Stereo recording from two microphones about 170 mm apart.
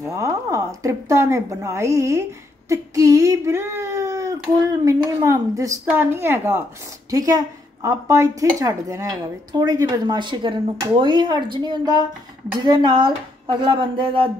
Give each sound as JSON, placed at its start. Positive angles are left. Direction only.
{"t": 0.0, "sound": "speech", "side_deg": -20}